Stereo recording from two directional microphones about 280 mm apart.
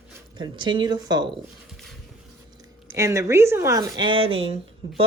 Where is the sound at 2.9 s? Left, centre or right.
Centre.